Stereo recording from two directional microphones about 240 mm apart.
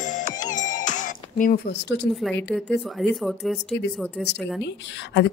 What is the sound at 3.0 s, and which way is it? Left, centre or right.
Speech, centre.